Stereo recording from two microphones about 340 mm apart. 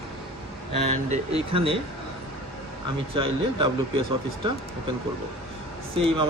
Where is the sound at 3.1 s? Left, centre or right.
Centre.